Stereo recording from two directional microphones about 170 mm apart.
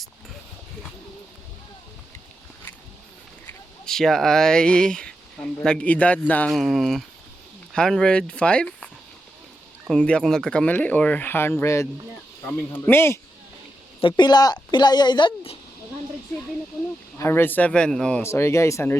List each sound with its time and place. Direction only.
3.8 s speech: 5° left (ahead or behind)
9.9 s speech: 5° left (ahead or behind)
14.1 s a woman's voice: 25° left (ahead or behind)
17.2 s speech: 15° left (ahead or behind)
18.2 s speech: 15° left (ahead or behind)